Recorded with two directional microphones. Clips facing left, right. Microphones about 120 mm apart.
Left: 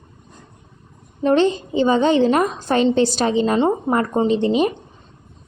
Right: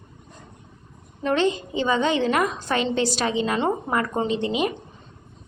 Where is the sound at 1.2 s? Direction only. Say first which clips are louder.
Left 6 dB; 30° left (ahead or behind).